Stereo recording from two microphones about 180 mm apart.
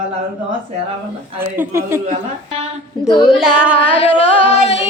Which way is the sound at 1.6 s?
15° right (ahead or behind).